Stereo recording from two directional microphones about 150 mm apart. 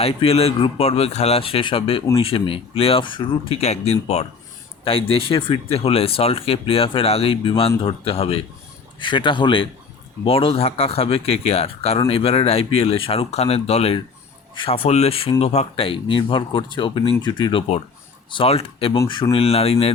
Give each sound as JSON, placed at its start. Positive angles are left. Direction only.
{"t": 0.0, "sound": "speech", "side_deg": 40}
{"t": 3.6, "sound": "speech", "side_deg": 45}